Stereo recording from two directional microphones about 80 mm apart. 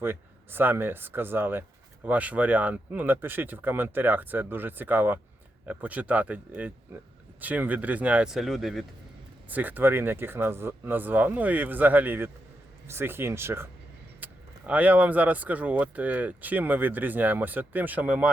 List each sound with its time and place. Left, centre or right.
0.0 s speech: right
8.4 s speech: centre
9.5 s speech: right
14.2 s vehicle: right
14.7 s speech: centre